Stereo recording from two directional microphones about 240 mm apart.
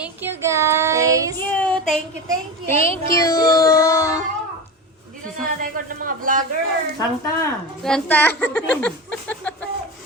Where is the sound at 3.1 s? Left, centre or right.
Centre.